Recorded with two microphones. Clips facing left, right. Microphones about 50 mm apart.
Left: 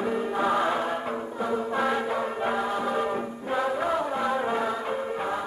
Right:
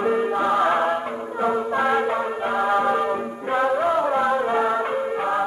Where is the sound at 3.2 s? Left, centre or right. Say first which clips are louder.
Right 5 dB; right.